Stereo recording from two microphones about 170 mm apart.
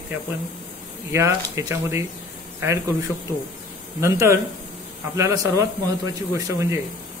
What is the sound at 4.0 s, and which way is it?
A man's voice, 15° right (ahead or behind).